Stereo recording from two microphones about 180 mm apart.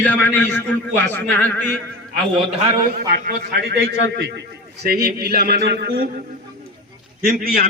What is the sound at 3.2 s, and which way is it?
A man's voice, 60° right (ahead or behind).